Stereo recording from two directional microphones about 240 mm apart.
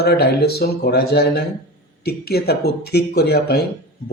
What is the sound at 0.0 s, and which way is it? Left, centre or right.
Speech, left.